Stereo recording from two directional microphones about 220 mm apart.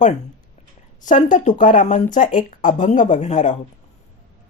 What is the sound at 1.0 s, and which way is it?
Speech, 35° left (ahead or behind).